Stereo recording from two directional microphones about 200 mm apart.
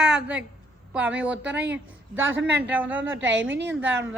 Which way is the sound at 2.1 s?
75° right (ahead or behind).